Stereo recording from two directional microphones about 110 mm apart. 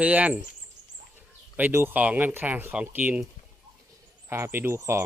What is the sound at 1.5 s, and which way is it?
Speech, 20° right (ahead or behind).